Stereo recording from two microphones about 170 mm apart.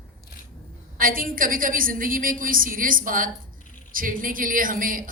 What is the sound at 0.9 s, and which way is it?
A woman's voice, 55° right (ahead or behind).